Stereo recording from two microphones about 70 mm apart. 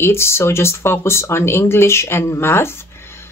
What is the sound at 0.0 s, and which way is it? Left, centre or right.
Speech, left.